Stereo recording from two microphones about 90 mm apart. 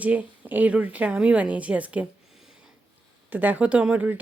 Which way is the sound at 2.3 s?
5° right (ahead or behind).